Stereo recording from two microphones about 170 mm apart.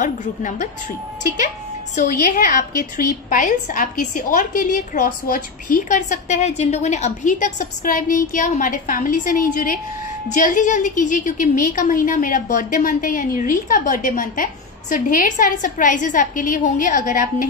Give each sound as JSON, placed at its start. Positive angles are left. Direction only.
{"t": 0.0, "sound": "a woman's voice", "side_deg": 45}
{"t": 2.0, "sound": "a woman's voice", "side_deg": 50}